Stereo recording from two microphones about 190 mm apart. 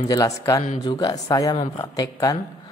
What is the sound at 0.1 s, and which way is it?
A man's voice, 20° left (ahead or behind).